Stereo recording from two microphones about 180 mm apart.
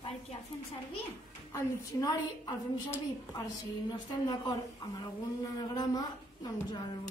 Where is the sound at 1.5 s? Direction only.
20° left (ahead or behind).